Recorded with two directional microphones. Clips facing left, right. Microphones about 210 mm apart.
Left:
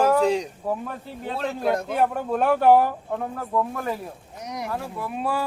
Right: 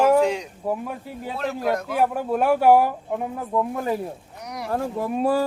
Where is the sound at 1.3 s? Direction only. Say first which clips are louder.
Even; 30° left (ahead or behind).